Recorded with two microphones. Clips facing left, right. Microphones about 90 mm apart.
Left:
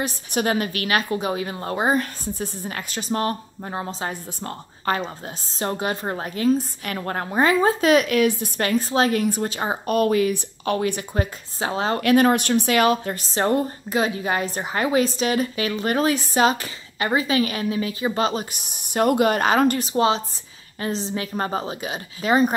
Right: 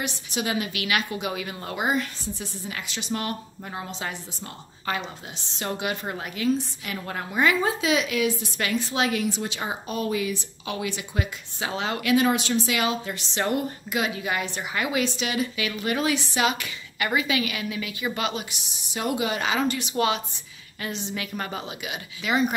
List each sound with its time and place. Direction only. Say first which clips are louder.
0.0 s a woman's voice: left 6 dB; 45° left (ahead or behind)
7.8 s speech: left 6 dB; 50° left (ahead or behind)
9.8 s speech: left 9 dB; 60° left (ahead or behind); by 12.1 s 35° left (ahead or behind)
12.1 s a woman's voice: left 4 dB; 55° left (ahead or behind)